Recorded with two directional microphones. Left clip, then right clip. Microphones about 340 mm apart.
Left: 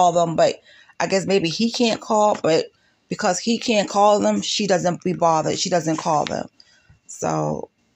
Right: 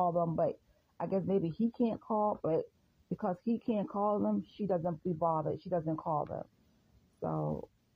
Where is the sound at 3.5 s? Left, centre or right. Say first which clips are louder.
Left 15 dB; right.